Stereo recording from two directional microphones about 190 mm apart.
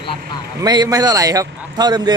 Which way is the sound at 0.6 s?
20° right (ahead or behind).